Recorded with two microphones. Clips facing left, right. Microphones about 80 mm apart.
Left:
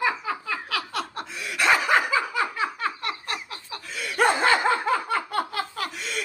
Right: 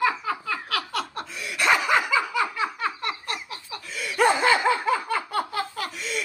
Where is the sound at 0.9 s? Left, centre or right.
Left.